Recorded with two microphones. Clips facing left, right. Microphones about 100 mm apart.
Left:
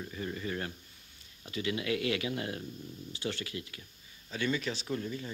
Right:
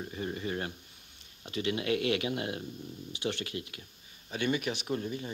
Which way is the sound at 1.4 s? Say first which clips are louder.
Right 2 dB; 25° right (ahead or behind).